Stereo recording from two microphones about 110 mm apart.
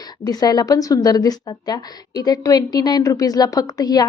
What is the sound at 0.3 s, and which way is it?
A woman's voice, 35° left (ahead or behind).